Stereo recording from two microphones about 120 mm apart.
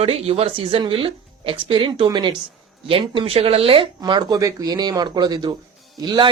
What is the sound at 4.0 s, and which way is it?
Speech, 35° right (ahead or behind).